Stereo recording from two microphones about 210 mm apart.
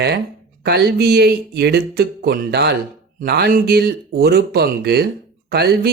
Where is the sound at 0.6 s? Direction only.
50° right (ahead or behind).